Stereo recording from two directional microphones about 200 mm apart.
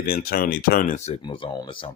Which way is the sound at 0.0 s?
50° left (ahead or behind).